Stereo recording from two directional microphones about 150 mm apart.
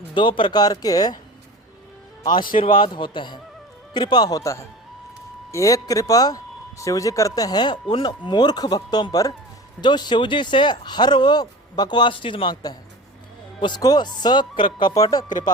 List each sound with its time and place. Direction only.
0.1 s speech: 35° left (ahead or behind)
2.2 s a man's voice: 30° left (ahead or behind)